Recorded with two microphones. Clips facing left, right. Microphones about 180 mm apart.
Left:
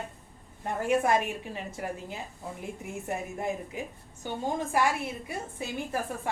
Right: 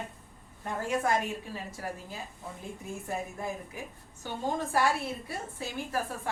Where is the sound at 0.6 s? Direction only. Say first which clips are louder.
Left 4 dB; 20° left (ahead or behind).